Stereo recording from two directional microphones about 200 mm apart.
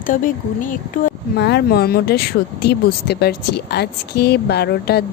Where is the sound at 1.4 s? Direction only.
55° left (ahead or behind).